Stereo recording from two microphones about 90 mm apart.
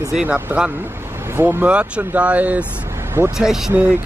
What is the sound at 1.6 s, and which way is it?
Speech, 15° right (ahead or behind).